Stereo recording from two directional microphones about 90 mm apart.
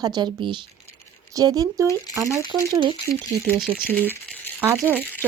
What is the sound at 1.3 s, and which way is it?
Speech, 45° right (ahead or behind).